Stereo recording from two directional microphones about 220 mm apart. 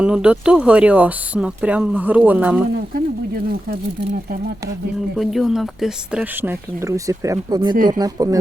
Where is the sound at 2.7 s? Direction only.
40° right (ahead or behind).